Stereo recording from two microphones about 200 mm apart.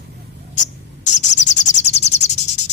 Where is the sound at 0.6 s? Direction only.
35° left (ahead or behind).